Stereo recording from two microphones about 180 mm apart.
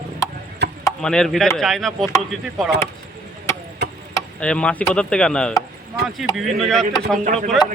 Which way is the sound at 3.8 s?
65° right (ahead or behind).